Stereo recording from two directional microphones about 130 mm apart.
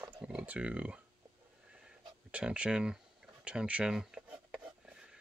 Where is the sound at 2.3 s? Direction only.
10° right (ahead or behind).